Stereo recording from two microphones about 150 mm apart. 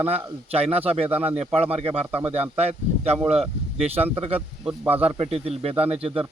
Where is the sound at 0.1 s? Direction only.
40° right (ahead or behind).